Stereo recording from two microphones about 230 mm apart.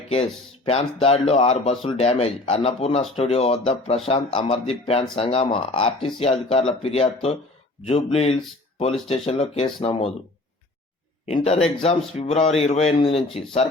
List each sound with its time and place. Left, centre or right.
0.1 s speech: left
11.3 s speech: left